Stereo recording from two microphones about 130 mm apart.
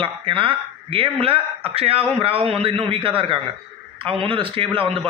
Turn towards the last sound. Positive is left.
turn(degrees=-45)  # may be behind; listen again after turning